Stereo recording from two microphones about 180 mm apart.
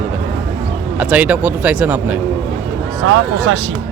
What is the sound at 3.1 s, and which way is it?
Speech, 90° right.